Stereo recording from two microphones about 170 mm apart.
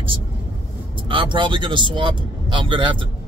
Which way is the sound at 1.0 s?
30° right (ahead or behind).